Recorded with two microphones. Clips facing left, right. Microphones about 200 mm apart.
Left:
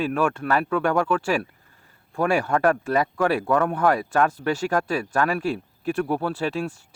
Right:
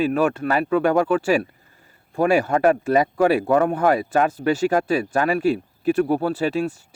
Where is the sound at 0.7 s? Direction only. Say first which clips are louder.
Right 6 dB; 20° right (ahead or behind).